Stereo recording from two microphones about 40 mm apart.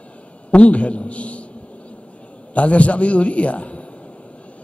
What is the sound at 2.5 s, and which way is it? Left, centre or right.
A man's voice, left.